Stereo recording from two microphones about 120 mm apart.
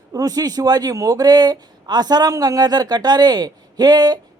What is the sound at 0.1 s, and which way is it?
Speech, 30° right (ahead or behind).